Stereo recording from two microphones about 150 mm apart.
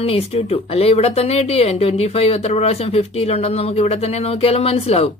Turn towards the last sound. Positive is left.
turn(degrees=40)  # may be behind; listen again after turning